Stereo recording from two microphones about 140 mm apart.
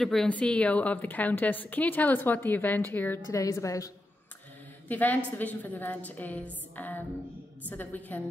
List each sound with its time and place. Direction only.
0.0 s a woman's voice: 5° left (ahead or behind); by 3.9 s 25° left (ahead or behind)
4.8 s a woman's voice: 10° left (ahead or behind)
6.7 s music: 10° left (ahead or behind)
7.7 s a woman's voice: 10° left (ahead or behind)